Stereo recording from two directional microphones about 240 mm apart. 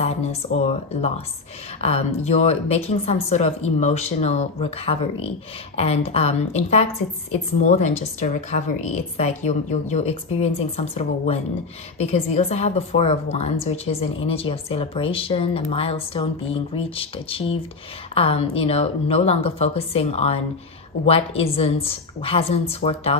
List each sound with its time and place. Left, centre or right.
0.0 s speech: left